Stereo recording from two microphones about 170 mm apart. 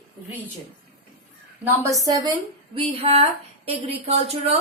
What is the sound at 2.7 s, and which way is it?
Speech, 35° right (ahead or behind).